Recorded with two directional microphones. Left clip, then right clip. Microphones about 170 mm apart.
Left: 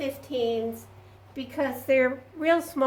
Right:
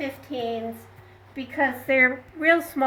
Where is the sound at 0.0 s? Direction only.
15° left (ahead or behind).